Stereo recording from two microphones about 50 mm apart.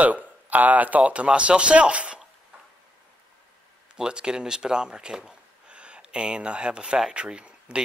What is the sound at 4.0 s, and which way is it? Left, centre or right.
Speech, centre.